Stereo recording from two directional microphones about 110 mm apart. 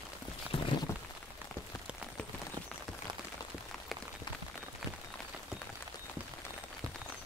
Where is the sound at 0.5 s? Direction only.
60° left (ahead or behind).